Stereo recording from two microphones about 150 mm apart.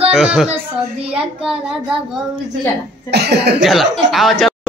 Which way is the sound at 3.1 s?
90° right.